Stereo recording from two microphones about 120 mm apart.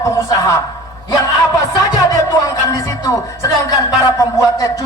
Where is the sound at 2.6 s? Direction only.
30° left (ahead or behind).